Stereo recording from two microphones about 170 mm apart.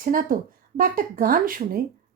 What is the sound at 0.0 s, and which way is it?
Speech, 55° right (ahead or behind).